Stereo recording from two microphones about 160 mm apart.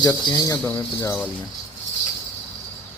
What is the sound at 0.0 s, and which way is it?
Speech, 20° left (ahead or behind).